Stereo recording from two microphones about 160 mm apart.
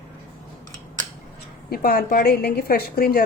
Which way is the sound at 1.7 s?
70° left (ahead or behind).